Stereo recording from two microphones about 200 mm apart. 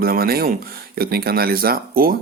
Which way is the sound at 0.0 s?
50° right (ahead or behind).